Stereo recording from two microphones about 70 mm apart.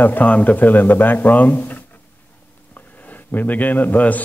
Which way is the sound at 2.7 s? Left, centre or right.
Left.